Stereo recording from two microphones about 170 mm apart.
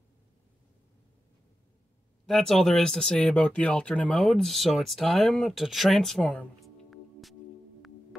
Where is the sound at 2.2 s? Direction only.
Centre (ahead or behind).